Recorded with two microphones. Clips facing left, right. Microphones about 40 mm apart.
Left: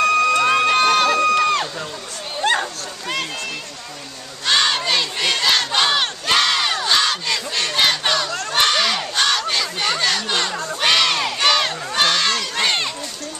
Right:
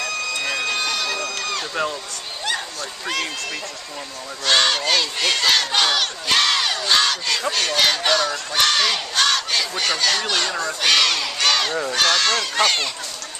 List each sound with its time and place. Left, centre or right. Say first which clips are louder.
0.4 s a sound: left 8 dB; left
2.4 s a sound: left 7 dB; left
4.5 s speech: even; centre
4.7 s battle cry: even; centre
6.3 s battle cry: left 1 dB; centre
7.9 s crowd: right 1 dB; centre
8.8 s battle cry: left 1 dB; centre
9.8 s a sound: even; centre
10.8 s crowd: left 1 dB; left
11.3 s crowd: left 2 dB; centre
12.6 s run: left 3 dB; centre